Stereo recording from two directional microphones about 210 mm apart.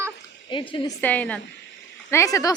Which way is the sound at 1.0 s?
5° left (ahead or behind).